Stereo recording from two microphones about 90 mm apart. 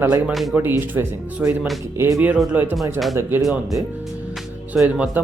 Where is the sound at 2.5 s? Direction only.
20° right (ahead or behind).